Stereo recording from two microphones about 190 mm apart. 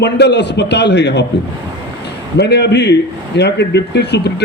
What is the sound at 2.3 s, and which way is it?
A man's voice, 60° left (ahead or behind).